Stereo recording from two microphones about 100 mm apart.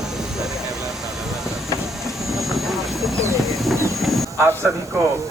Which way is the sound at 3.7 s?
30° right (ahead or behind).